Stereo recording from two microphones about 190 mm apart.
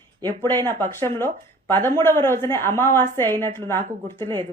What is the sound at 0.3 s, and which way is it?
Speech, 20° right (ahead or behind).